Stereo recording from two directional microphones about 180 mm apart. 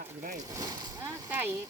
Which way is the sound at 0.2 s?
45° right (ahead or behind).